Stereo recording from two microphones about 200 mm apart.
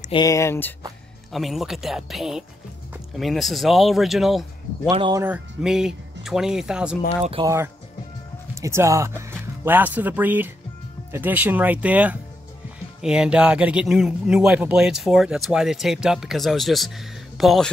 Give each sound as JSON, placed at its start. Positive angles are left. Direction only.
{"t": 0.1, "sound": "speech", "side_deg": 15}
{"t": 1.3, "sound": "a man's voice", "side_deg": 0}
{"t": 4.8, "sound": "speech", "side_deg": -20}
{"t": 5.2, "sound": "a man's voice", "side_deg": -5}